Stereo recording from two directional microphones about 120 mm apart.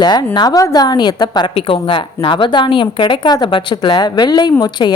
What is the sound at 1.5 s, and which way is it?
A woman's voice, 45° left (ahead or behind).